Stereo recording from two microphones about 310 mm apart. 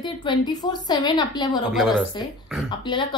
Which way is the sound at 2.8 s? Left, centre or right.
Centre.